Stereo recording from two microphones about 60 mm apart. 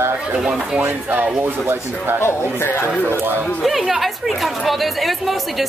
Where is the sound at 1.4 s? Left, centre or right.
Right.